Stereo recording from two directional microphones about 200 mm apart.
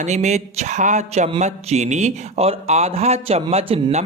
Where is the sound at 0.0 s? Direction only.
35° right (ahead or behind).